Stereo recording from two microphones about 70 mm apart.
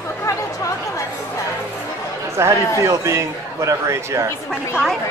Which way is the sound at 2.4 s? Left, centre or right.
Right.